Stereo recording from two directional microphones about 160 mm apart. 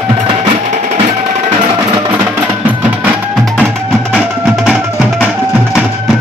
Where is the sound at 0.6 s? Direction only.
50° right (ahead or behind).